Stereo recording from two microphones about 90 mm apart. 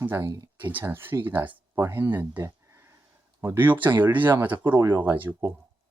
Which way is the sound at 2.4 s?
30° right (ahead or behind).